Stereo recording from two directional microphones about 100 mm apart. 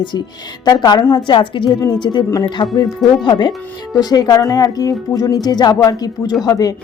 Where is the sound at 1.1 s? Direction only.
50° left (ahead or behind).